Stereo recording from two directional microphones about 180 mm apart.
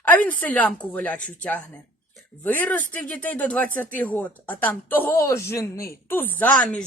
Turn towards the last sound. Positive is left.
turn(degrees=10)  # may be behind; listen again after turning